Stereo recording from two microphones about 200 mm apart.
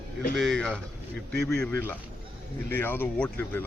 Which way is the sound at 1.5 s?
5° left (ahead or behind).